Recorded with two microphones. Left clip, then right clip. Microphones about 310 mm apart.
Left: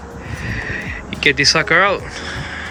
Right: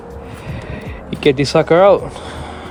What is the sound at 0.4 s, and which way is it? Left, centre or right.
Vehicle, centre.